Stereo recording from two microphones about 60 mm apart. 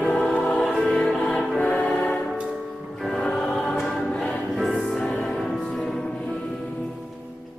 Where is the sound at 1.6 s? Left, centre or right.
Centre.